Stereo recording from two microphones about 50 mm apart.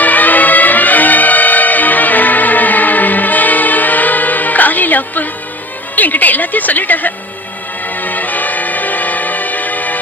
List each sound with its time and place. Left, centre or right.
0.0 s music: left